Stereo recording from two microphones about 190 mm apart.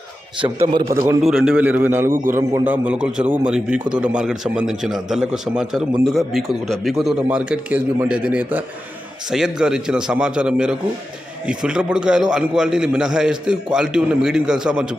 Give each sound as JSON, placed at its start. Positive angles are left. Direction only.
{"t": 0.6, "sound": "a man's voice", "side_deg": -15}
{"t": 1.2, "sound": "a man's voice", "side_deg": -5}
{"t": 2.1, "sound": "a man's voice", "side_deg": -45}
{"t": 2.5, "sound": "a man's voice", "side_deg": -10}